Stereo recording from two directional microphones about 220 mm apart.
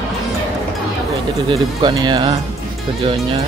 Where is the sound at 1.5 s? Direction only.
20° right (ahead or behind).